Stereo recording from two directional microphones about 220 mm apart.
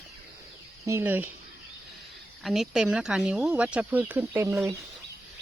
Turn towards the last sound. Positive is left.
turn(degrees=-10)  # may be behind; listen again after turning